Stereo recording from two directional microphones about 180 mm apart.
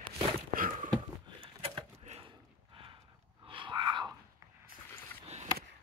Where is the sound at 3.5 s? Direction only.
25° right (ahead or behind).